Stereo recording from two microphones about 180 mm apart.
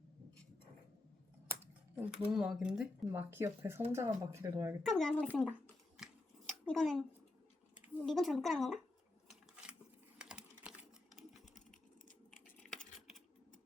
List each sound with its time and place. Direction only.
2.0 s speech: centre (ahead or behind); by 4.7 s 20° right (ahead or behind)
4.8 s scissors: centre (ahead or behind)
8.0 s speech: centre (ahead or behind)
10.2 s typing: 5° right (ahead or behind)
12.3 s a sound: centre (ahead or behind)